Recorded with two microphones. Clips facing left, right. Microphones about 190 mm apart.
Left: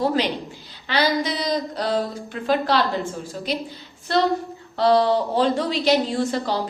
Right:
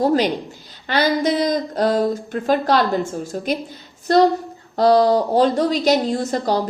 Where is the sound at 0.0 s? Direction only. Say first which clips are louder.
Right 4 dB; 45° right (ahead or behind).